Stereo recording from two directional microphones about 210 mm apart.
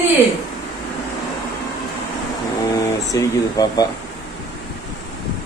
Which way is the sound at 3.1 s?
15° left (ahead or behind).